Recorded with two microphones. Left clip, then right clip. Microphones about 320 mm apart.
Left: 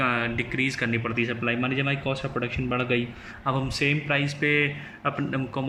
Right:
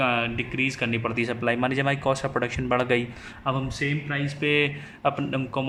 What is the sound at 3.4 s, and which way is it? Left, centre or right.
A man's voice, centre.